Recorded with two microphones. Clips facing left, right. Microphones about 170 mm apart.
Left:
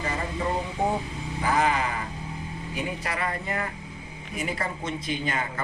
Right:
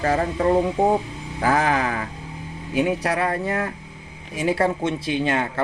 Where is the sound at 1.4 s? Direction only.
90° right.